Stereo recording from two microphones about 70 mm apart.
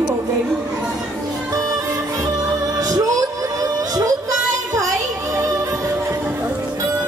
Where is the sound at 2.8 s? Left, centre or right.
Right.